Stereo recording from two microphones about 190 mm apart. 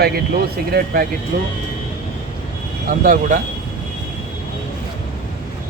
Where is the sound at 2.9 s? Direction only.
45° right (ahead or behind).